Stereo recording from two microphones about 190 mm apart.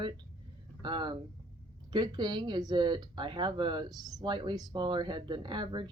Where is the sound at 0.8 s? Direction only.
25° right (ahead or behind).